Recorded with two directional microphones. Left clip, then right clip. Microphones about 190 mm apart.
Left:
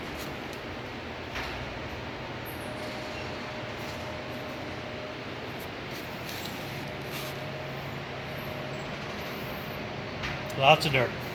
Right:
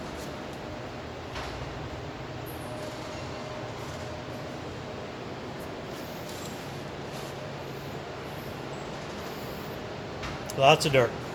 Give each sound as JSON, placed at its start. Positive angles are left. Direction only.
{"t": 10.6, "sound": "speech", "side_deg": -25}